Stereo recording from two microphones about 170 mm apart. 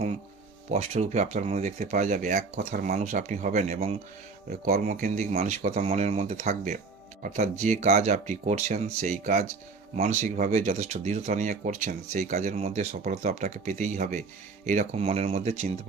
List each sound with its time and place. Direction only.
0.7 s speech: 40° right (ahead or behind)
4.4 s speech: 60° right (ahead or behind)
4.9 s speech: 45° right (ahead or behind)